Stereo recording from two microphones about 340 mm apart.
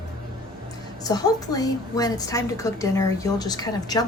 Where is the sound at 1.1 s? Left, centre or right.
Centre.